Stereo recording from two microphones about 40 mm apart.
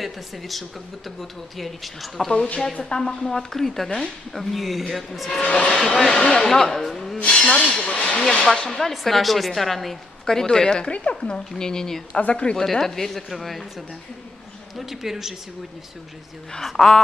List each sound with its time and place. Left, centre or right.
0.0 s a woman's voice: centre
2.3 s speech: left
2.8 s a woman's voice: centre
5.5 s a woman's voice: centre
7.2 s a sound: left
7.5 s speech: centre
7.8 s hiss: left
8.3 s speech: left
8.6 s a woman's voice: centre
14.8 s a man's voice: centre
16.6 s a woman's voice: centre